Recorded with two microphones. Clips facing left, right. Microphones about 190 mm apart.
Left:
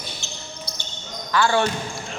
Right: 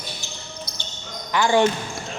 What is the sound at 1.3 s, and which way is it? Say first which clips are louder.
Speech: right 1 dB; 20° right (ahead or behind).